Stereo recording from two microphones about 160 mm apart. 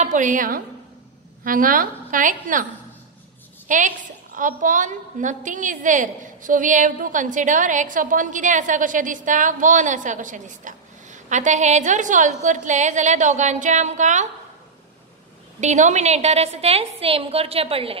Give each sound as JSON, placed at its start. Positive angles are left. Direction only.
{"t": 0.0, "sound": "a woman's voice", "side_deg": -50}
{"t": 3.6, "sound": "a woman's voice", "side_deg": -55}
{"t": 15.6, "sound": "a woman's voice", "side_deg": -50}